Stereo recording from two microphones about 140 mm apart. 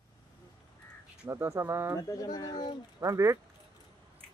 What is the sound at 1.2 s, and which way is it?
Speech, 15° right (ahead or behind).